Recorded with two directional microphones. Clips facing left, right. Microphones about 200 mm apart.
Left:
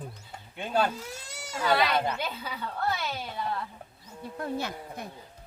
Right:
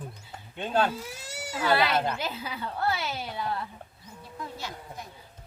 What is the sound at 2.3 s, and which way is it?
A woman's voice, 5° right (ahead or behind).